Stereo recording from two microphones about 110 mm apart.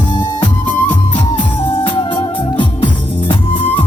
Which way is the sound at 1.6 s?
55° left (ahead or behind).